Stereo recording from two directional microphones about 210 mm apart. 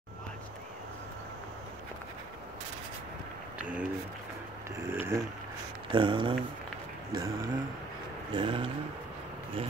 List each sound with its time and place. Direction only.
3.5 s a sound: 5° right (ahead or behind)
4.7 s speech: 10° right (ahead or behind)
5.9 s speech: 20° right (ahead or behind)